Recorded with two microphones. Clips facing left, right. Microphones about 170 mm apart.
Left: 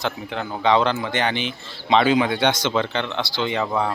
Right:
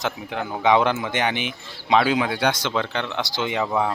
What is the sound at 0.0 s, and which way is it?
Speech, 15° right (ahead or behind).